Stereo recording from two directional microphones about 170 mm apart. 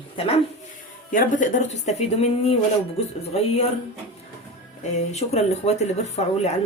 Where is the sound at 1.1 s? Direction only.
50° left (ahead or behind).